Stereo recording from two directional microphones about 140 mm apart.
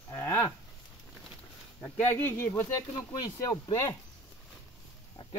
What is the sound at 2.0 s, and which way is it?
Speech, 15° left (ahead or behind).